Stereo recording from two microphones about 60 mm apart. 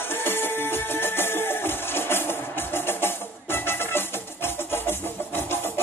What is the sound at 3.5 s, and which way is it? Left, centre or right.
Music, left.